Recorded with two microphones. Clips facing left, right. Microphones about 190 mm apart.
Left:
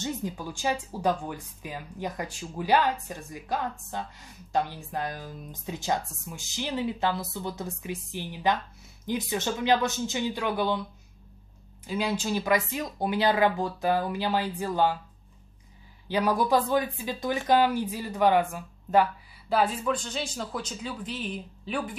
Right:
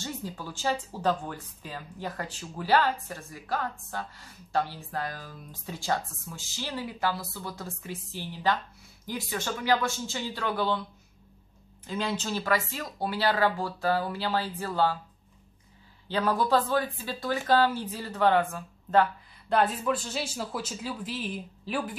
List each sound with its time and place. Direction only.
0.0 s speech: 15° left (ahead or behind)
11.8 s speech: 10° left (ahead or behind)
16.1 s speech: 10° left (ahead or behind)
19.5 s speech: centre (ahead or behind)